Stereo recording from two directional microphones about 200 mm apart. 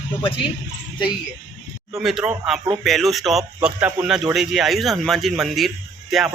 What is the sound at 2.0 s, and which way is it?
Speech, centre (ahead or behind).